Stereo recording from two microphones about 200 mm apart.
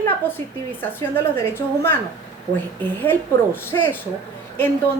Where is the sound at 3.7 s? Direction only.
20° left (ahead or behind).